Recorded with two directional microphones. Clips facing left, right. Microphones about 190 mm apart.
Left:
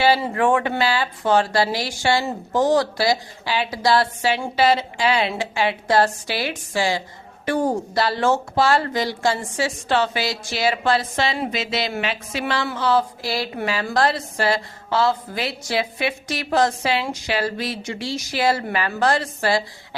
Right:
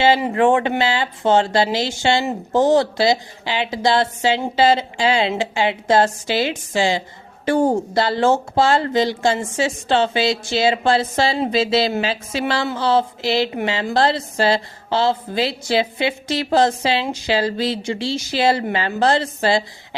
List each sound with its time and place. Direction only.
0.0 s speech: 20° right (ahead or behind)